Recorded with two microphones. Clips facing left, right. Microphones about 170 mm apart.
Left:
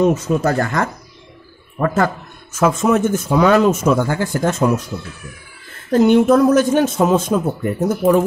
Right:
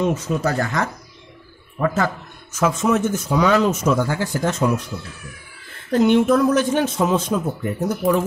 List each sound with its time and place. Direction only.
0.0 s a man's voice: 45° left (ahead or behind)
2.5 s a man's voice: 55° left (ahead or behind)
5.9 s a man's voice: 40° left (ahead or behind)